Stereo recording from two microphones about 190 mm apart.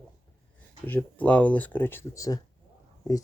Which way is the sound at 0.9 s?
10° left (ahead or behind).